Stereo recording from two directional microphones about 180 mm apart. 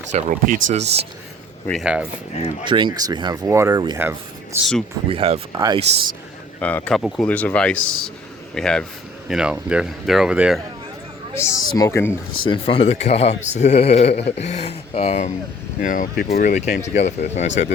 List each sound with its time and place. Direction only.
0.1 s speech: 45° right (ahead or behind)
1.6 s speech: centre (ahead or behind)
2.3 s speech: 35° left (ahead or behind)
2.6 s speech: 25° right (ahead or behind)
4.5 s speech: centre (ahead or behind)
5.1 s speech: 35° right (ahead or behind)
5.5 s speech: 20° right (ahead or behind)
6.6 s speech: 10° left (ahead or behind)
11.3 s speech: 15° left (ahead or behind)
12.4 s speech: 30° left (ahead or behind); by 16.8 s 50° left (ahead or behind)
16.8 s speech: 40° left (ahead or behind)